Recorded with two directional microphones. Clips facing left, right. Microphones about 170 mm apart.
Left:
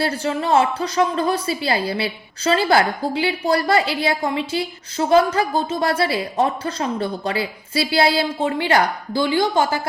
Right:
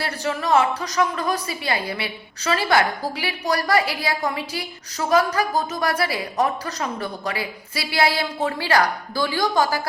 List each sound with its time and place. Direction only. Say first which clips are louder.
0.0 s a woman's voice: left 4 dB; 30° left (ahead or behind)